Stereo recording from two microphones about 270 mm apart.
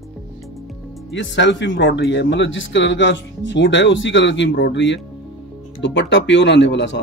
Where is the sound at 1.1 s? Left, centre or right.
Left.